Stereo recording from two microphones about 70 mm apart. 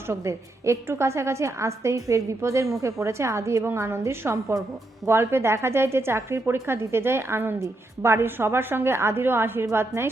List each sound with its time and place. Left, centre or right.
0.1 s a woman's voice: right